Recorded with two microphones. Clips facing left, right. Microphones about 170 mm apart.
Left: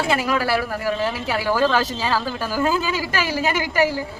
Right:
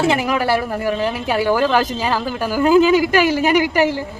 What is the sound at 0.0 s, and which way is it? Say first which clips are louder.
A woman's voice: right 4 dB; 20° right (ahead or behind).